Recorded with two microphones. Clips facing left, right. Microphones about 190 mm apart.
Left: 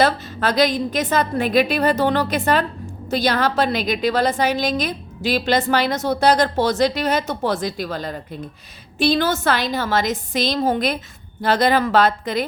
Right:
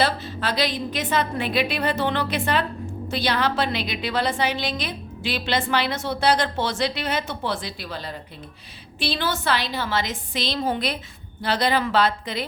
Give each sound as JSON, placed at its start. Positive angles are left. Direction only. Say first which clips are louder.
{"t": 0.0, "sound": "a woman's voice", "louder": "left 5 dB", "side_deg": 45}